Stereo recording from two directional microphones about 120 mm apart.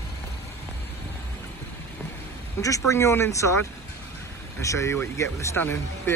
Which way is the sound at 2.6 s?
25° left (ahead or behind).